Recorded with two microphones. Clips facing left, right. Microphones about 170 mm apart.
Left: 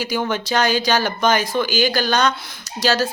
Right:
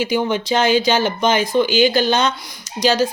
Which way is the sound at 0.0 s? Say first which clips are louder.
Right 4 dB; 20° right (ahead or behind).